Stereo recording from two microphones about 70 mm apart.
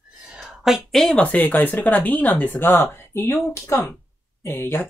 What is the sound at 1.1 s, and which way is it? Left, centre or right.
Speech, left.